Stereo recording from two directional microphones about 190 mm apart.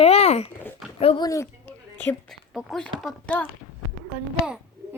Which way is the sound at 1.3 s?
15° left (ahead or behind).